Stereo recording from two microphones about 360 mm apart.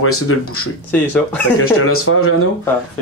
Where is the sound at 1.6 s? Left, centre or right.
Left.